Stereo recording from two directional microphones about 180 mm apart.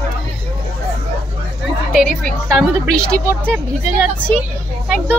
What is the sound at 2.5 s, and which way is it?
Speech, 5° left (ahead or behind).